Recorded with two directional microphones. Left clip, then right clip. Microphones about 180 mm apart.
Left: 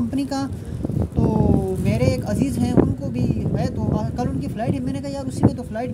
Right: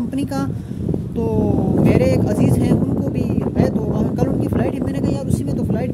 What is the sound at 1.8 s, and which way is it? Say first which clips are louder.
Speech: right 6 dB; 10° right (ahead or behind).